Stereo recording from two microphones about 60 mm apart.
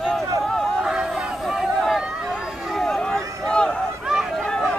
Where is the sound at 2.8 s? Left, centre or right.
Centre.